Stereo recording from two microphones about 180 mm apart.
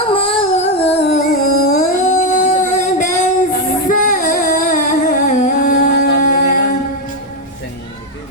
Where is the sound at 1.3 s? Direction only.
45° left (ahead or behind).